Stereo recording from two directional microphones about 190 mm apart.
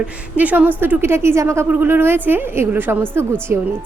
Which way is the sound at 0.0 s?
10° right (ahead or behind).